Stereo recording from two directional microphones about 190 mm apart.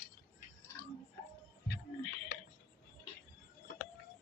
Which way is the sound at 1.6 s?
55° left (ahead or behind).